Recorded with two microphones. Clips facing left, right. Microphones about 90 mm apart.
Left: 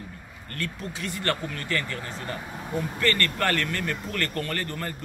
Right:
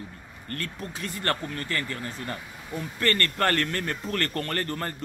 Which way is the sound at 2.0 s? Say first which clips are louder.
Even; 25° left (ahead or behind).